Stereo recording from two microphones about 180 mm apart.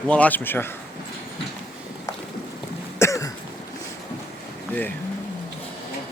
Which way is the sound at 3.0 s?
15° left (ahead or behind).